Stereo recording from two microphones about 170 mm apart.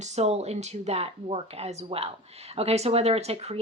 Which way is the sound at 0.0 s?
40° right (ahead or behind).